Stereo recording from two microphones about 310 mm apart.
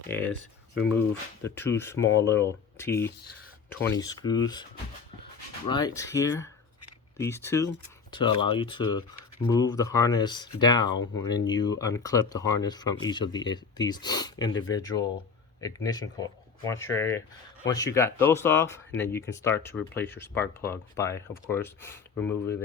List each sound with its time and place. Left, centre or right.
0.1 s speech: centre
5.6 s speech: centre